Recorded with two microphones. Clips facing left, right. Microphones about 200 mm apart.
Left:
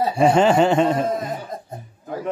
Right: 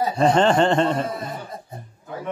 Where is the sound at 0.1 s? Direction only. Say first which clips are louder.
Left 2 dB; 10° left (ahead or behind).